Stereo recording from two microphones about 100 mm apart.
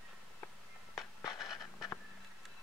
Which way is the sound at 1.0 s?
35° left (ahead or behind).